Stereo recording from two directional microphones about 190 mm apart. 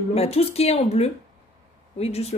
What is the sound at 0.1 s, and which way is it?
A woman's voice, 30° left (ahead or behind).